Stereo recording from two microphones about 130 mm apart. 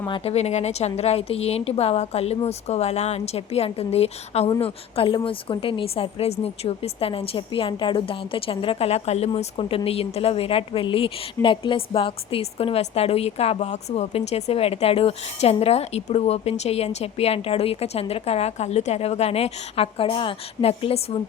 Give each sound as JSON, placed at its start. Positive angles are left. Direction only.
{"t": 0.3, "sound": "a woman's voice", "side_deg": 55}